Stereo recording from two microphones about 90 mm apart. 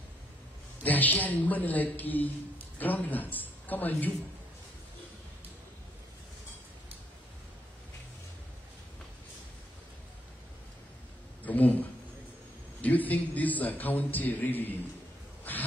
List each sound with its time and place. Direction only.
0.8 s a man's voice: 20° left (ahead or behind)
11.4 s a man's voice: 20° left (ahead or behind)
15.5 s a sound: 20° left (ahead or behind)